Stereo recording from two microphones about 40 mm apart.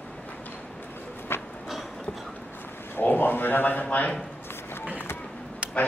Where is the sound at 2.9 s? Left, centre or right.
Left.